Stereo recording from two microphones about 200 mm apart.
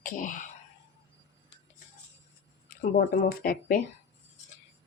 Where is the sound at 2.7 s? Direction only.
45° left (ahead or behind).